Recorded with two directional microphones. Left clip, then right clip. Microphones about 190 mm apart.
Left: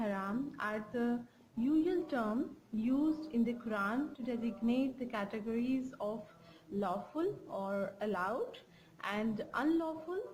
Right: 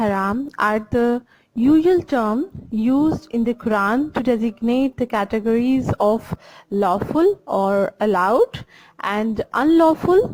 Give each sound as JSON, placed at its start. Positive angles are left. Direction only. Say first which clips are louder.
{"t": 0.0, "sound": "a woman's voice", "louder": "right 17 dB", "side_deg": -45}